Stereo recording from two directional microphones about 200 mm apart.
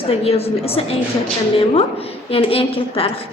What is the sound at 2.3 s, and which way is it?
Speech, 30° left (ahead or behind).